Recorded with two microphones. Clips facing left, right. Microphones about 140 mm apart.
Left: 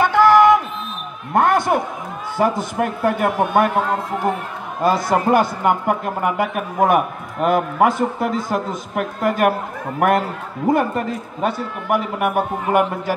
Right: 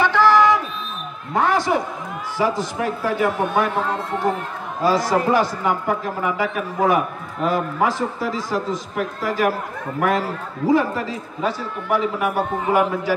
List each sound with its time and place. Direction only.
0.0 s music: 50° left (ahead or behind)
1.3 s basketball bounce: 55° left (ahead or behind)
2.3 s a man's voice: 55° left (ahead or behind)
4.8 s a man's voice: 55° left (ahead or behind)